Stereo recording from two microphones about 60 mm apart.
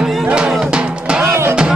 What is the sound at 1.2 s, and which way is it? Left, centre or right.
Music, right.